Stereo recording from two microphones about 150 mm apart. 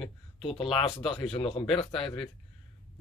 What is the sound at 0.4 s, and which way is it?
Speech, 35° left (ahead or behind).